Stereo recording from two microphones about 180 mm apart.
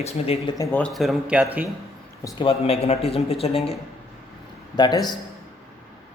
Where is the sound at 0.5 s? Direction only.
20° left (ahead or behind).